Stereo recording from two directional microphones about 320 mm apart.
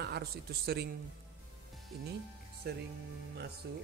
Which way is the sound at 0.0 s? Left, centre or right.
Right.